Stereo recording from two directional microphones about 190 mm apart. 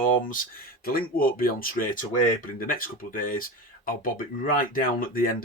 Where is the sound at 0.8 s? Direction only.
50° left (ahead or behind).